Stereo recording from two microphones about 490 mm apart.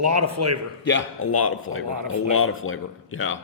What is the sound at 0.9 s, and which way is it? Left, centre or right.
Speech, left.